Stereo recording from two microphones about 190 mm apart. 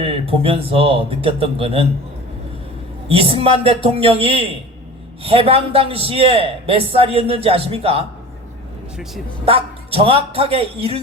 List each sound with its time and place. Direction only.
0.0 s a man's voice: 30° right (ahead or behind)
3.1 s a man's voice: 30° right (ahead or behind)
9.5 s speech: 30° right (ahead or behind)